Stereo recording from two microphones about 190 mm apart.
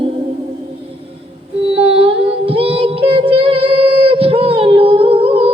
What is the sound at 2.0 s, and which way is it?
Female singing, 30° right (ahead or behind).